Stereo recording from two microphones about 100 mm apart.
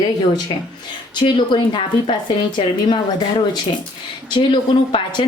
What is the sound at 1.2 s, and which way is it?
Speech, 55° left (ahead or behind).